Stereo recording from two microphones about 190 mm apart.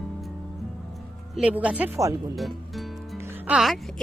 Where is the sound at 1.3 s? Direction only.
5° right (ahead or behind).